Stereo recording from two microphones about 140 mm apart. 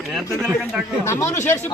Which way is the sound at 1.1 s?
20° left (ahead or behind).